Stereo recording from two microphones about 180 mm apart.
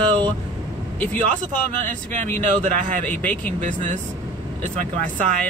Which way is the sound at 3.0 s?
10° left (ahead or behind).